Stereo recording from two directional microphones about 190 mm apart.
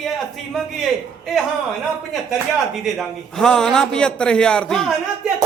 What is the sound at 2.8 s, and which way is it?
A man's voice, centre (ahead or behind).